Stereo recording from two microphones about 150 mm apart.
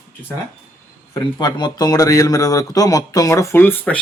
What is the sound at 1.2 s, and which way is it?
Speech, 30° left (ahead or behind).